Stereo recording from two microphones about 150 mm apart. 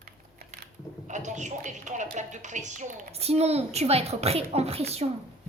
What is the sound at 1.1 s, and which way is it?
Speech, 55° right (ahead or behind).